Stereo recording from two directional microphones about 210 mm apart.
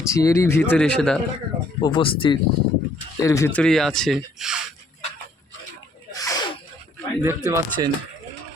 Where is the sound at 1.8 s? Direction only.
20° left (ahead or behind); by 4.6 s centre (ahead or behind).